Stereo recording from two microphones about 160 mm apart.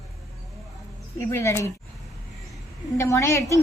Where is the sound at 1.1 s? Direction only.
15° left (ahead or behind).